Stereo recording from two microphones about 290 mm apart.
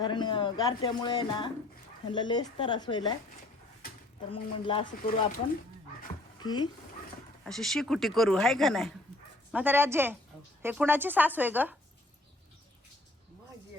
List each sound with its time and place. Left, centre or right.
0.0 s speech: centre
4.3 s speech: centre
6.4 s speech: centre
7.4 s a woman's voice: centre